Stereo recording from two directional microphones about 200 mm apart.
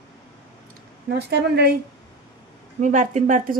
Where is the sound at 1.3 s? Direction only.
55° right (ahead or behind).